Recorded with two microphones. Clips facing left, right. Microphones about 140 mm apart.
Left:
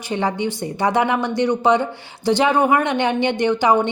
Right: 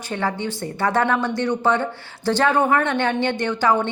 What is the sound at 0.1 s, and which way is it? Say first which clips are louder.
A woman's voice: left 3 dB; 15° left (ahead or behind).